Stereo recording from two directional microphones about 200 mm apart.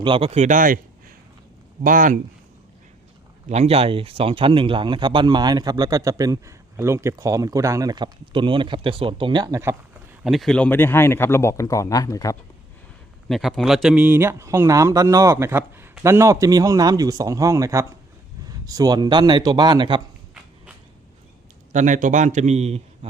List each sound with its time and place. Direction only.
0.0 s speech: 25° right (ahead or behind); by 2.1 s 45° right (ahead or behind)
3.5 s speech: 30° right (ahead or behind); by 9.7 s 15° right (ahead or behind)
10.2 s speech: centre (ahead or behind); by 12.4 s 15° left (ahead or behind)
13.2 s speech: centre (ahead or behind); by 20.0 s 20° right (ahead or behind)
21.7 s a man's voice: 40° right (ahead or behind)